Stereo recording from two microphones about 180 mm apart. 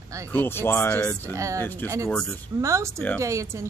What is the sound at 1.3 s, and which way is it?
Speech, 15° right (ahead or behind).